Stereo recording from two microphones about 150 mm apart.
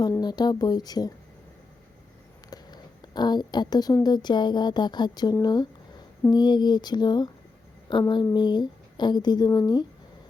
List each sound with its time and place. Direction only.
0.2 s speech: 30° left (ahead or behind)
2.5 s speech: 30° left (ahead or behind)